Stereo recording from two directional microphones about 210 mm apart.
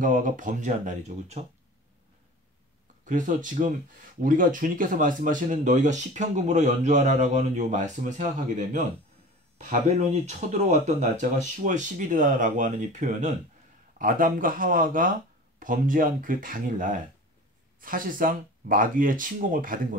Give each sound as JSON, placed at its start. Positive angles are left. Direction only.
{"t": 0.0, "sound": "speech", "side_deg": -40}
{"t": 3.1, "sound": "speech", "side_deg": -35}